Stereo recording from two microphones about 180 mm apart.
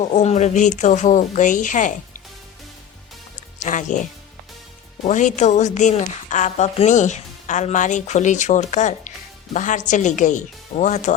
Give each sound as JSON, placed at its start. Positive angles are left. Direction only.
{"t": 0.0, "sound": "a woman's voice", "side_deg": 40}
{"t": 3.6, "sound": "speech", "side_deg": 45}
{"t": 5.0, "sound": "a woman's voice", "side_deg": 45}